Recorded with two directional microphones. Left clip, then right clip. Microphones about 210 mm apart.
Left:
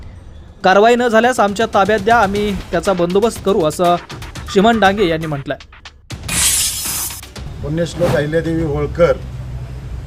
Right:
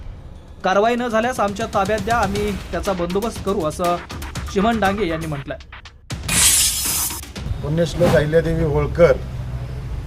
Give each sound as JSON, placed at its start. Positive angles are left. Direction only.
{"t": 0.6, "sound": "speech", "side_deg": 25}
{"t": 6.1, "sound": "music", "side_deg": 0}